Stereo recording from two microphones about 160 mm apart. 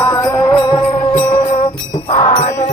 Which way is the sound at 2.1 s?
35° left (ahead or behind).